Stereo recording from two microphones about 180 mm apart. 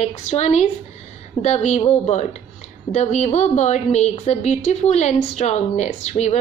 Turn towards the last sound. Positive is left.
turn(degrees=40)  # may be behind; listen again after turning